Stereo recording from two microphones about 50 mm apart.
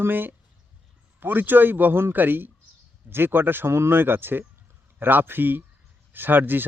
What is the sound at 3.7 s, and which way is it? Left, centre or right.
A man's voice, right.